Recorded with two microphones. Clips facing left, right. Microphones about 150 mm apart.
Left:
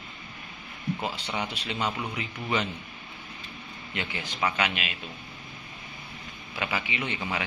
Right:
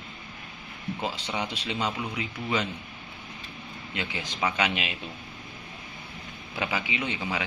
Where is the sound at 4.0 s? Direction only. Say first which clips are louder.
Even; 10° right (ahead or behind).